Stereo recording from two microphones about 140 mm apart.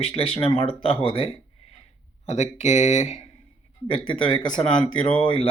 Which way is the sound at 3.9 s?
35° left (ahead or behind).